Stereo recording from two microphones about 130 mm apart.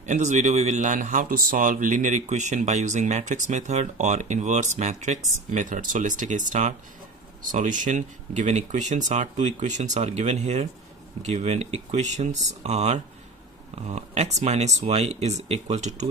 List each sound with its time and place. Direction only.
0.0 s speech: 65° right (ahead or behind)